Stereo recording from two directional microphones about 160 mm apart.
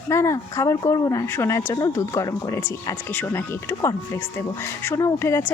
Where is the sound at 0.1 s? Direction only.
15° left (ahead or behind).